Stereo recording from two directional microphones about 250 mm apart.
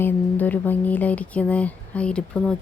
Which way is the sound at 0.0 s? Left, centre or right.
Centre.